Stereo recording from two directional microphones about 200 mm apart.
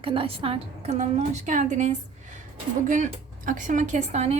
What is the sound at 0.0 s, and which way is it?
A woman's voice, 25° right (ahead or behind).